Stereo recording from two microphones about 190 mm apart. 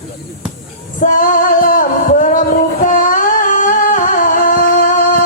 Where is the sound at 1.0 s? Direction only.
45° left (ahead or behind).